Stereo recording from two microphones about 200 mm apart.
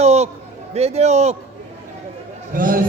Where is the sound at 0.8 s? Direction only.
30° right (ahead or behind).